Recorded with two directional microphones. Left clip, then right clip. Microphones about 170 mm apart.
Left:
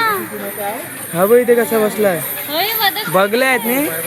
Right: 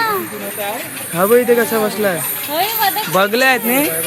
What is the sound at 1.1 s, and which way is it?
Speech, 5° left (ahead or behind).